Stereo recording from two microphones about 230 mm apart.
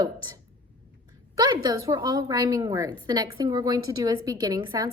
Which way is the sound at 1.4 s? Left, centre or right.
Centre.